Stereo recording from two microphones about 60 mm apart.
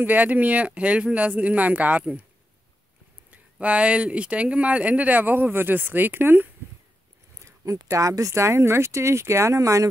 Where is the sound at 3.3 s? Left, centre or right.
Right.